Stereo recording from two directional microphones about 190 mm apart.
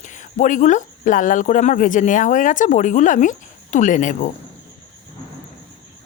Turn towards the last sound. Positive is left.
turn(degrees=40)  # may be behind; listen again after turning